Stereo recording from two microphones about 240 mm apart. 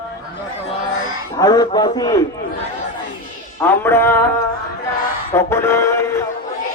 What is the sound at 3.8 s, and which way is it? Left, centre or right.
Music, centre.